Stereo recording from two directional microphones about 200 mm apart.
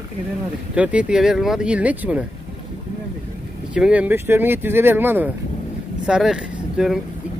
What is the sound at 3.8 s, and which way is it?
Speech, 5° right (ahead or behind).